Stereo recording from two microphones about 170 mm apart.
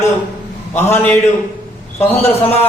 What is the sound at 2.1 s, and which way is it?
Speech, 35° left (ahead or behind).